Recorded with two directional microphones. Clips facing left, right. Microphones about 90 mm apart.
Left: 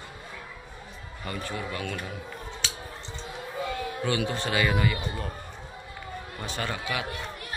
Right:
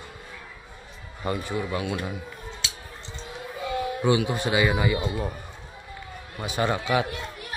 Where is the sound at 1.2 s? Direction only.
20° right (ahead or behind).